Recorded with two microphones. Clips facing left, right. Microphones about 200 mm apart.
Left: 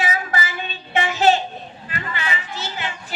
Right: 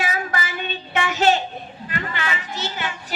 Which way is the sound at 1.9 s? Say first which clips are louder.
Right 1 dB; 50° right (ahead or behind).